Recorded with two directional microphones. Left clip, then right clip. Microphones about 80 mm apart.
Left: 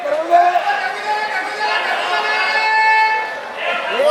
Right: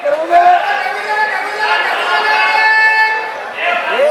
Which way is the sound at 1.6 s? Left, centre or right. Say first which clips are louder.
Right 5 dB; right.